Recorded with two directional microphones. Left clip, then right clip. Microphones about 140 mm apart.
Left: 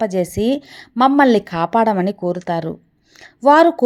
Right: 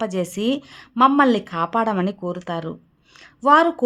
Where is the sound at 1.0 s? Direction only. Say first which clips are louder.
Left 3 dB; 25° left (ahead or behind).